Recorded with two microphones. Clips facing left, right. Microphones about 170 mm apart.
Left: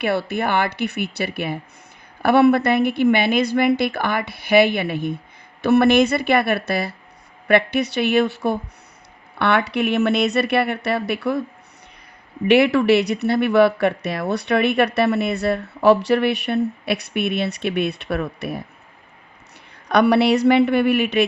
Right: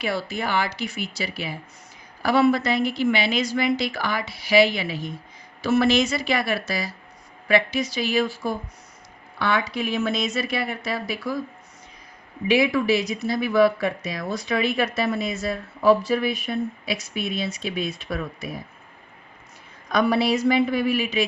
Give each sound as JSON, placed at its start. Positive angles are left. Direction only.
{"t": 0.0, "sound": "speech", "side_deg": 60}
{"t": 12.5, "sound": "speech", "side_deg": 65}
{"t": 19.9, "sound": "a woman's voice", "side_deg": 65}